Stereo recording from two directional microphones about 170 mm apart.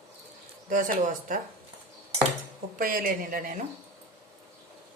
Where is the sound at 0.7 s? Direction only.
50° right (ahead or behind).